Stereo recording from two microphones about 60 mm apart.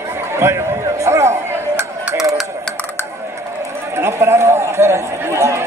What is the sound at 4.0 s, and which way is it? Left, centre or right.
Speech, right.